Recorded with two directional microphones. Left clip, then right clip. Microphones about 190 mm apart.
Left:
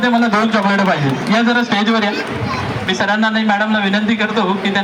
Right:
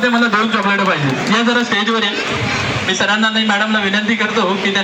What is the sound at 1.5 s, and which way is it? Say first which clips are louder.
A man's voice: even; 35° left (ahead or behind).